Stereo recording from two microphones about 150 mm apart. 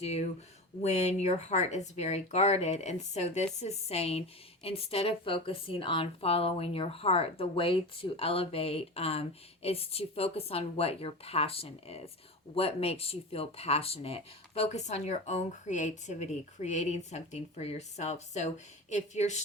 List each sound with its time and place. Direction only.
0.0 s a woman's voice: 45° left (ahead or behind)